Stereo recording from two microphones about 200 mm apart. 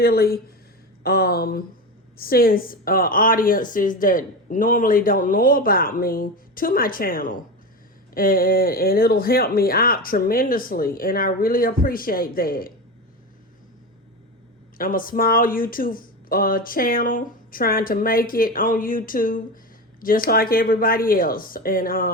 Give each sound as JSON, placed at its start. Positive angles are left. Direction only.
{"t": 0.0, "sound": "a woman's voice", "side_deg": 50}
{"t": 14.8, "sound": "a woman's voice", "side_deg": 45}